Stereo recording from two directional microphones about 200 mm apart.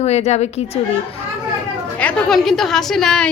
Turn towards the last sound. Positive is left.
turn(degrees=5)  # may be behind; listen again after turning